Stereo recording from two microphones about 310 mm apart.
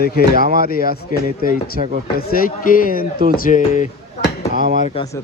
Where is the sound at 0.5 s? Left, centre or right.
Left.